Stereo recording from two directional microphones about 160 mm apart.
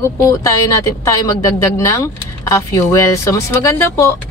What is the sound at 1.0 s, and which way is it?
Speech, 20° left (ahead or behind).